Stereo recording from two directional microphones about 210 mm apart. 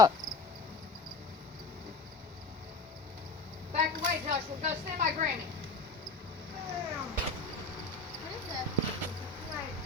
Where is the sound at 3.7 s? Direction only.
40° right (ahead or behind).